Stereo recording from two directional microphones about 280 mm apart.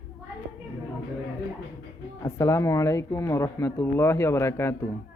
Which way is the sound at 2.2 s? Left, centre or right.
Centre.